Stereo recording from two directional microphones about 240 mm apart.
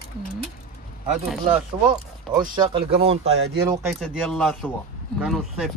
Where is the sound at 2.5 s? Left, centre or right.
Centre.